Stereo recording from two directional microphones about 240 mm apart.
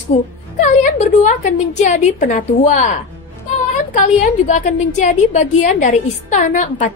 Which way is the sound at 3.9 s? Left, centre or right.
Left.